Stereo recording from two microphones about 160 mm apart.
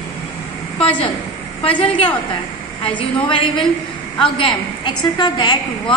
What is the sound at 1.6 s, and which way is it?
A woman's voice, 35° left (ahead or behind).